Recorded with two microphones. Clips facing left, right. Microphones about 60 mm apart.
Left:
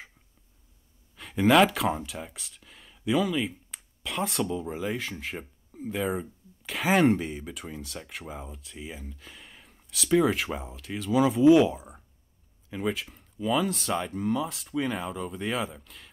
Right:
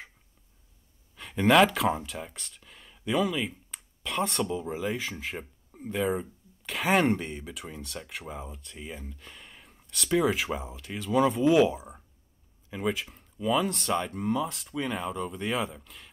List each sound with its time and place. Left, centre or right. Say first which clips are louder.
1.1 s speech: left 1 dB; centre